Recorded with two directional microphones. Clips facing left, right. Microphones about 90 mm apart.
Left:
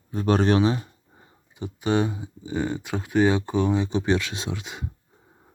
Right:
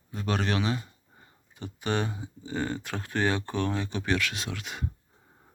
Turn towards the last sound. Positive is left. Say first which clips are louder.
# left 3 dB
turn(degrees=20)  # may be behind; listen again after turning